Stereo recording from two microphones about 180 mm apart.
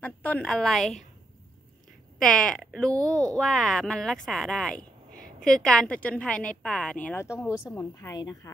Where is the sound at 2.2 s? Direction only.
5° left (ahead or behind).